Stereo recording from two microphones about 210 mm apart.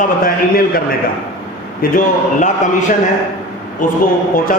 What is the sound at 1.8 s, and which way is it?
Speech, 40° left (ahead or behind).